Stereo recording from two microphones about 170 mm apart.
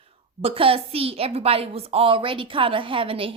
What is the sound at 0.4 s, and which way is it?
A woman's voice, 35° right (ahead or behind).